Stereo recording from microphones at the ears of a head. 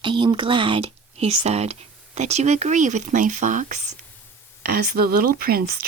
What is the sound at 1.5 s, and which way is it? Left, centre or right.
Speech, right.